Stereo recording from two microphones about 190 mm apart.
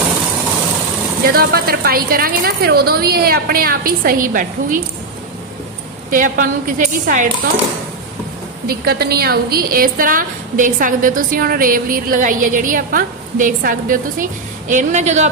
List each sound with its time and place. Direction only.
1.3 s a woman's voice: 55° right (ahead or behind)
6.1 s a woman's voice: 45° right (ahead or behind)
8.6 s a woman's voice: 55° right (ahead or behind); by 15.3 s 40° right (ahead or behind)